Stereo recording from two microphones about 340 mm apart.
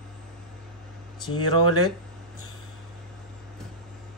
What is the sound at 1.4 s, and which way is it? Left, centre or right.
Speech, centre.